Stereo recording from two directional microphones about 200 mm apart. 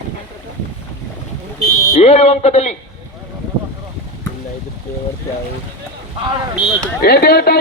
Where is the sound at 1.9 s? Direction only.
30° left (ahead or behind).